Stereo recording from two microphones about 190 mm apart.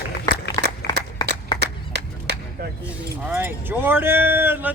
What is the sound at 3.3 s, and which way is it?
Speech, 10° right (ahead or behind).